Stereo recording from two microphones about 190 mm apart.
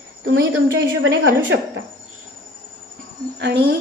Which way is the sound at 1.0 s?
75° right (ahead or behind).